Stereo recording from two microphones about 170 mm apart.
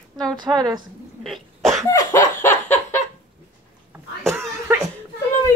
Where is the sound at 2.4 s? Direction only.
15° left (ahead or behind).